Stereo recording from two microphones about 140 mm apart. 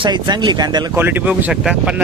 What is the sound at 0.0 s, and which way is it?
Speech, 30° right (ahead or behind).